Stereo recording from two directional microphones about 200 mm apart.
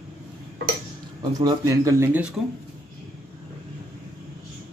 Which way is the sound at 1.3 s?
15° right (ahead or behind).